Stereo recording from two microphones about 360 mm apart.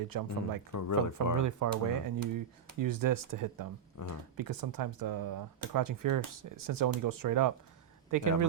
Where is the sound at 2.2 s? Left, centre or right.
Right.